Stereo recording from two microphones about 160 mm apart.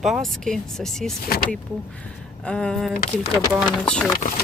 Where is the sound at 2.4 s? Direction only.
5° left (ahead or behind).